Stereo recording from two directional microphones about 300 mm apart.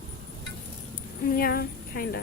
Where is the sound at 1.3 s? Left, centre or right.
Left.